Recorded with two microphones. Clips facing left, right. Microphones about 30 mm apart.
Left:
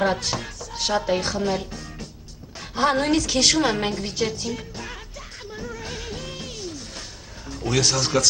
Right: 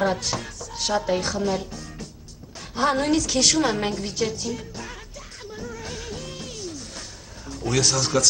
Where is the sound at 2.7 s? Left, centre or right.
Centre.